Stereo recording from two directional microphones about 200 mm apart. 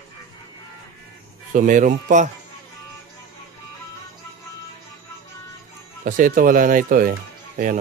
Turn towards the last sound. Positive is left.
turn(degrees=-45)  # may be behind; listen again after turning